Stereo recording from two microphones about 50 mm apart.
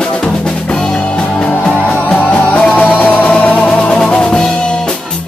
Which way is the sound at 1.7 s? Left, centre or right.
Left.